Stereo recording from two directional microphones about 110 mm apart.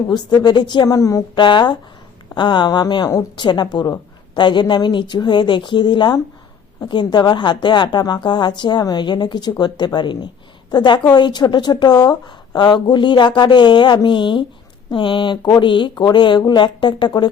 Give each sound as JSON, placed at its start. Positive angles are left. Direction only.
{"t": 0.1, "sound": "a woman's voice", "side_deg": 40}
{"t": 1.4, "sound": "a woman's voice", "side_deg": 45}